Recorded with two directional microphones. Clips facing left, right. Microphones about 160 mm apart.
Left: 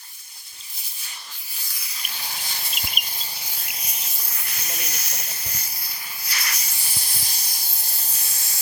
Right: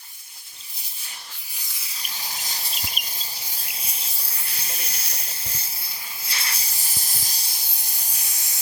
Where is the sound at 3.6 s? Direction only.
30° right (ahead or behind).